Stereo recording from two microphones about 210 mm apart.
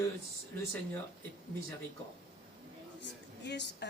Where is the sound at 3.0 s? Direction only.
55° left (ahead or behind).